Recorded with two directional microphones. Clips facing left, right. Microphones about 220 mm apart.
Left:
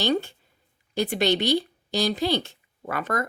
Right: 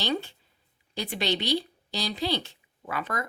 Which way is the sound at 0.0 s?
45° left (ahead or behind).